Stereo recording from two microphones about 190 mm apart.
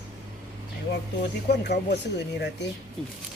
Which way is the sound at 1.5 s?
60° left (ahead or behind).